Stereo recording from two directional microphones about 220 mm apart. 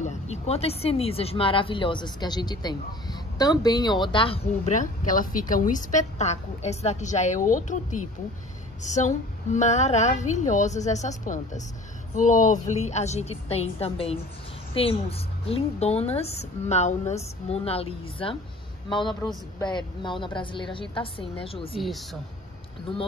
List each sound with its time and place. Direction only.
0.0 s a woman's voice: 30° left (ahead or behind)
21.7 s speech: centre (ahead or behind)